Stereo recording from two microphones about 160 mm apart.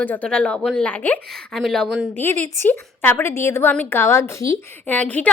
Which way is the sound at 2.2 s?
10° left (ahead or behind).